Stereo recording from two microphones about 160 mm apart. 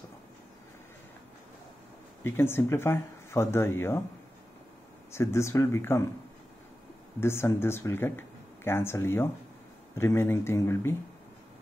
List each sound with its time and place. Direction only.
2.2 s speech: 15° left (ahead or behind)
5.1 s speech: 15° left (ahead or behind)
7.2 s speech: 15° left (ahead or behind)